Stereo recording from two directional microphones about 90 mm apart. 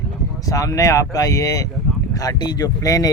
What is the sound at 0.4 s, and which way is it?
Speech, 40° left (ahead or behind).